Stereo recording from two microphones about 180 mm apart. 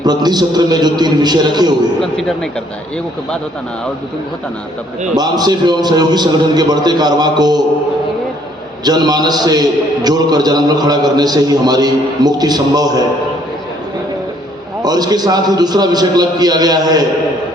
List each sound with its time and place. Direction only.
0.0 s a man's voice: 20° right (ahead or behind)
2.0 s speech: 5° left (ahead or behind)
5.1 s a man's voice: 20° right (ahead or behind)
8.8 s a man's voice: 20° right (ahead or behind)
14.8 s a man's voice: 20° right (ahead or behind)